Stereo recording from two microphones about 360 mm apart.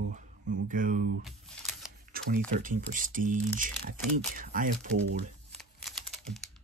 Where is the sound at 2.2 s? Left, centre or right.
Right.